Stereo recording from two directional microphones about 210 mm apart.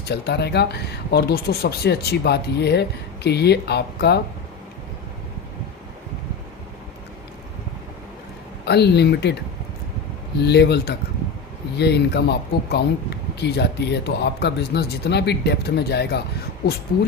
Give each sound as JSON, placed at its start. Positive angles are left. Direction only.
{"t": 0.0, "sound": "speech", "side_deg": 50}
{"t": 8.6, "sound": "speech", "side_deg": 50}
{"t": 10.4, "sound": "speech", "side_deg": 50}